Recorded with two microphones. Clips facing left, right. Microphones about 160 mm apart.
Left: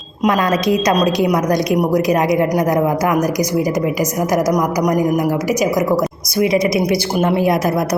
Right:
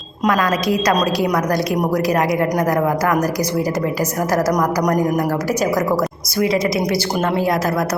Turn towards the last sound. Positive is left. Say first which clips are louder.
# left 3 dB
turn(degrees=15)  # may be behind; listen again after turning